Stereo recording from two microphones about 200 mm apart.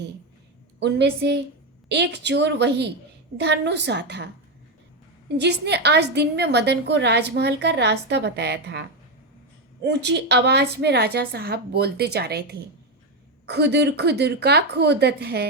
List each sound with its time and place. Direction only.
0.8 s a woman's voice: 55° right (ahead or behind)
5.4 s a woman's voice: 55° right (ahead or behind)
9.8 s a woman's voice: 60° right (ahead or behind)